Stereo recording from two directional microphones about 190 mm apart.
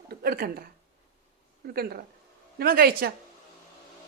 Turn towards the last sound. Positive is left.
turn(degrees=-50)  # may be behind; listen again after turning